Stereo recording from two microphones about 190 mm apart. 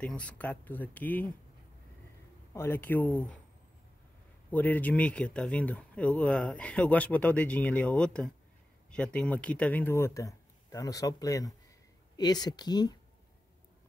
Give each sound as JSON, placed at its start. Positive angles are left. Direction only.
{"t": 0.0, "sound": "speech", "side_deg": 5}
{"t": 2.5, "sound": "speech", "side_deg": 10}
{"t": 4.5, "sound": "speech", "side_deg": 10}